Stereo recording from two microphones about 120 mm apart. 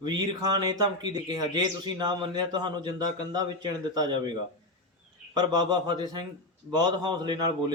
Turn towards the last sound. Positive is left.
turn(degrees=-35)  # may be behind; listen again after turning